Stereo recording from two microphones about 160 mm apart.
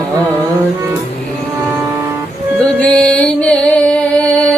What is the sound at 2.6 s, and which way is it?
Music, 5° left (ahead or behind).